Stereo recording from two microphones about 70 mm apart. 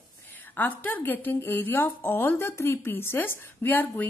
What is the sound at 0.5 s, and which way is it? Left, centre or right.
Speech, left.